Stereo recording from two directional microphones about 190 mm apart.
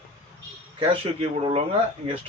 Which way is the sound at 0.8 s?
25° right (ahead or behind).